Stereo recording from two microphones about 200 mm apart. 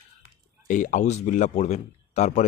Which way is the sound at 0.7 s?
40° left (ahead or behind).